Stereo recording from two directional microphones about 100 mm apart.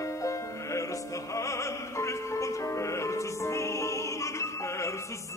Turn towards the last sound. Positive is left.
turn(degrees=30)  # may be behind; listen again after turning